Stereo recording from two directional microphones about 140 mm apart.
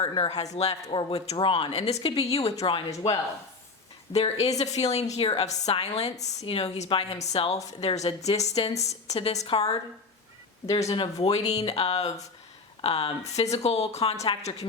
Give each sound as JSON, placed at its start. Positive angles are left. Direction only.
{"t": 0.1, "sound": "a woman's voice", "side_deg": 45}
{"t": 0.9, "sound": "a woman's voice", "side_deg": 35}
{"t": 4.1, "sound": "a woman's voice", "side_deg": 50}
{"t": 10.8, "sound": "a woman's voice", "side_deg": 40}